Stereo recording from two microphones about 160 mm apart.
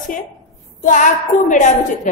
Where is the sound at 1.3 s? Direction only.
55° left (ahead or behind).